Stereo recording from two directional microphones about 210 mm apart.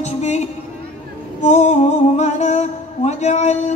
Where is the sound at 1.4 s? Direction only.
35° left (ahead or behind).